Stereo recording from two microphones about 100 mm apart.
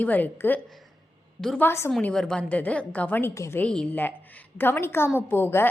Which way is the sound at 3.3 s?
30° left (ahead or behind).